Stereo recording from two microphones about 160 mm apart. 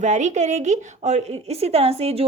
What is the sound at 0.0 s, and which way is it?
A woman's voice, 45° right (ahead or behind).